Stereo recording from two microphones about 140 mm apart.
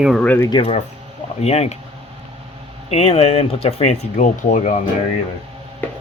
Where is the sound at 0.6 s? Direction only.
50° left (ahead or behind).